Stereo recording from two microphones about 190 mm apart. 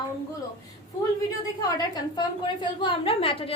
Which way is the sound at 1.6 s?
20° left (ahead or behind).